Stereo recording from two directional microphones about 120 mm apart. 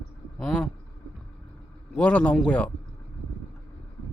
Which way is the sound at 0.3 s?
5° left (ahead or behind).